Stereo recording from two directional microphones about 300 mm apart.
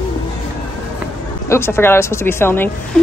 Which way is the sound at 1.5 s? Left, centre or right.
Centre.